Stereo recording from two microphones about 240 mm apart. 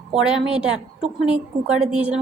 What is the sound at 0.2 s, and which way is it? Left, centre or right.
Speech, centre.